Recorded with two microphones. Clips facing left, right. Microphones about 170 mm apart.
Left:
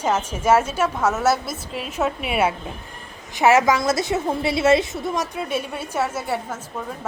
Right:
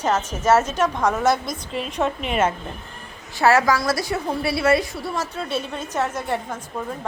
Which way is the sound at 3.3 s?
20° left (ahead or behind).